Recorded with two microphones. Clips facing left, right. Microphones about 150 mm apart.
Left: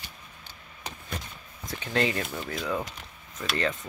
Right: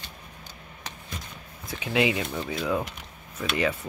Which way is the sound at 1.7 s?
10° right (ahead or behind).